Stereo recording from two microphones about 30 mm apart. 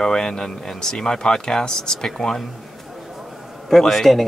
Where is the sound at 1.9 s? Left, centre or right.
Centre.